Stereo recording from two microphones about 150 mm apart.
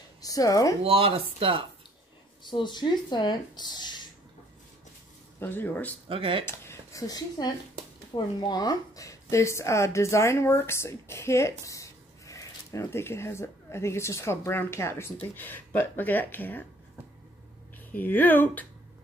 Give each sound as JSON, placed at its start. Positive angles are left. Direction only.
{"t": 0.2, "sound": "speech", "side_deg": 25}
{"t": 0.8, "sound": "speech", "side_deg": -40}
{"t": 2.5, "sound": "speech", "side_deg": 30}
{"t": 5.4, "sound": "speech", "side_deg": 10}
{"t": 6.0, "sound": "speech", "side_deg": -35}
{"t": 6.4, "sound": "speech", "side_deg": 20}
{"t": 17.7, "sound": "speech", "side_deg": 10}